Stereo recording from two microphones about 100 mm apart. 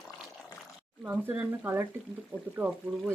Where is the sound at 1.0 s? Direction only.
15° right (ahead or behind).